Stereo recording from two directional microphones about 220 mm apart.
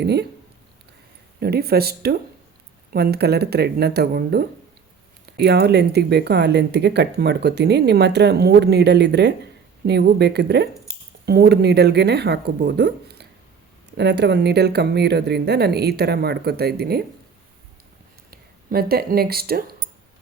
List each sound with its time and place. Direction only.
0.0 s speech: 50° right (ahead or behind)
1.4 s speech: 45° right (ahead or behind)
18.3 s speech: 45° right (ahead or behind)